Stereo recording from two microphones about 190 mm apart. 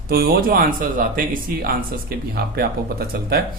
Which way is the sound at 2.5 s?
55° right (ahead or behind).